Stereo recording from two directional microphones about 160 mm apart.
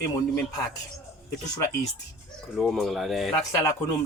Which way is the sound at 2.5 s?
Centre (ahead or behind).